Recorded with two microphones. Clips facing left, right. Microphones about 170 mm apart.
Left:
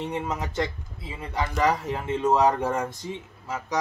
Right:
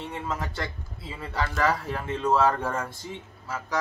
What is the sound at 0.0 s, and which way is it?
Speech, 20° left (ahead or behind).